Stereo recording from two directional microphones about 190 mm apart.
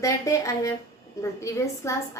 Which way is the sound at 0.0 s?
15° left (ahead or behind).